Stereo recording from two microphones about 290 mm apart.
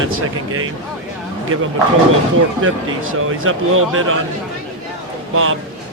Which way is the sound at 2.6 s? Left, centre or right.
Right.